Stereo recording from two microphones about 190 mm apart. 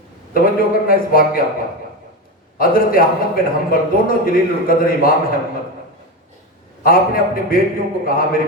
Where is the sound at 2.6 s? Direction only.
50° left (ahead or behind).